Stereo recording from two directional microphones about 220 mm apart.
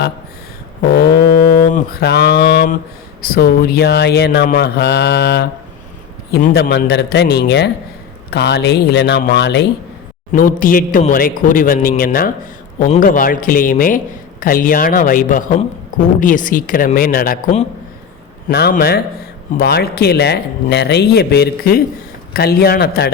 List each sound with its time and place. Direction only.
0.8 s speech: 45° left (ahead or behind)
10.3 s a man's voice: 40° left (ahead or behind)